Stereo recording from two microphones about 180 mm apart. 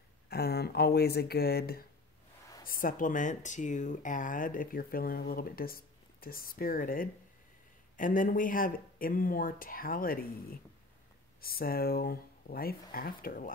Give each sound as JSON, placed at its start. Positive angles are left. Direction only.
{"t": 0.3, "sound": "speech", "side_deg": 60}